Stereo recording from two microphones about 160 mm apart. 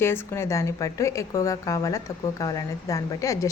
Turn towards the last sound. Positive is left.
turn(degrees=20)  # may be behind; listen again after turning